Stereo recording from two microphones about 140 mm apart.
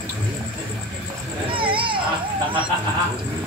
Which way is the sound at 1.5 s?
35° right (ahead or behind).